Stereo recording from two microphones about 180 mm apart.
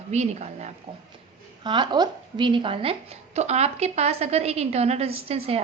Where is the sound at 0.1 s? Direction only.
40° right (ahead or behind).